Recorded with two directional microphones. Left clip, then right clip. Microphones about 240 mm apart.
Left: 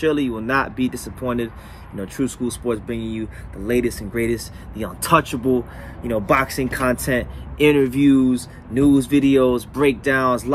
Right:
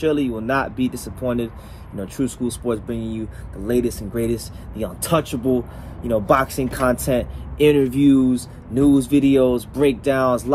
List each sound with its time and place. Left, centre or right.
0.0 s speech: centre